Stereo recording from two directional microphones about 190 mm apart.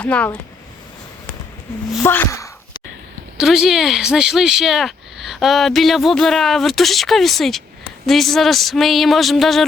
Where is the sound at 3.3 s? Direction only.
Centre (ahead or behind).